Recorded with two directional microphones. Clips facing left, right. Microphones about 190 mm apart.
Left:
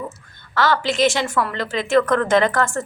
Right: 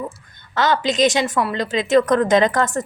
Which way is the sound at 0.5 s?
20° right (ahead or behind).